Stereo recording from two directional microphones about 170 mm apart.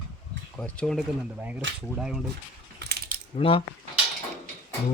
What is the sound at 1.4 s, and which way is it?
Speech, 10° right (ahead or behind).